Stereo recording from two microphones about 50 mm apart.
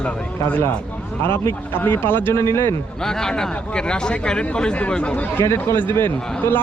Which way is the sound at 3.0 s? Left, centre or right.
Centre.